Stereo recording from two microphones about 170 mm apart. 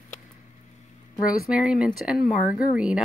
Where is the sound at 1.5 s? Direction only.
5° right (ahead or behind).